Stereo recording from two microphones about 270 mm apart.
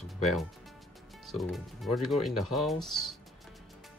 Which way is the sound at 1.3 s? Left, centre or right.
Centre.